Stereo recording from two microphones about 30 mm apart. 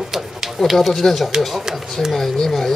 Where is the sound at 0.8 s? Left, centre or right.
Centre.